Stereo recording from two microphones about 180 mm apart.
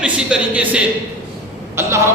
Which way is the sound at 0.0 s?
5° right (ahead or behind).